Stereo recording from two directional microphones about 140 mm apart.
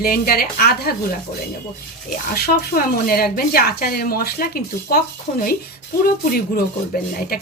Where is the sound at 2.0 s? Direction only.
90° left.